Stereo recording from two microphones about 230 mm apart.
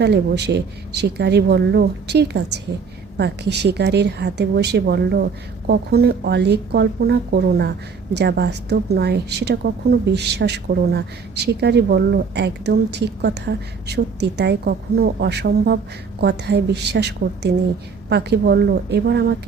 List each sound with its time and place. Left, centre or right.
0.0 s a woman's voice: right